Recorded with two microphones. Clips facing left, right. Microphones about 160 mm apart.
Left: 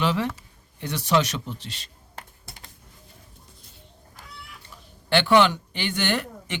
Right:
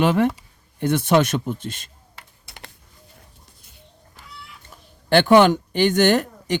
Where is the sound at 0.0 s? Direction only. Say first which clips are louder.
Right 7 dB; 50° right (ahead or behind).